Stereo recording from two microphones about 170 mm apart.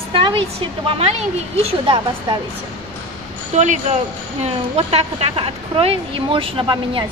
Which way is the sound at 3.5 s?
45° right (ahead or behind).